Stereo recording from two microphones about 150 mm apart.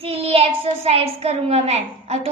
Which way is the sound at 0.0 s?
40° right (ahead or behind).